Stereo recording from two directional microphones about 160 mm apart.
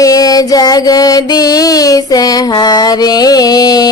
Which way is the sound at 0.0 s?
20° left (ahead or behind).